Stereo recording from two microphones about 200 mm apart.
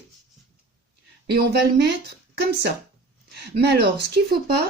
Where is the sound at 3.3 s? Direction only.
55° right (ahead or behind).